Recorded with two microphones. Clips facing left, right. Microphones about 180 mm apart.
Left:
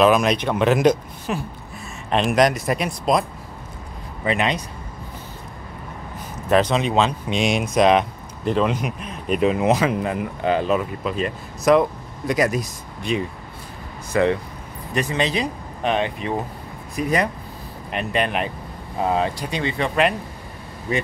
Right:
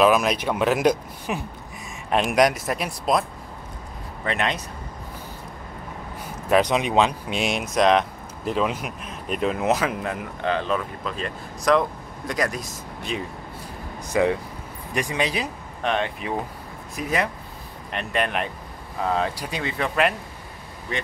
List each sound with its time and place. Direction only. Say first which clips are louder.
0.0 s speech: left 2 dB; 5° right (ahead or behind)
6.5 s speech: left 1 dB; 15° right (ahead or behind)
14.1 s speech: left 2 dB; 10° right (ahead or behind)
19.0 s speech: left 3 dB; 20° left (ahead or behind)
19.3 s speech: left 4 dB; 5° right (ahead or behind)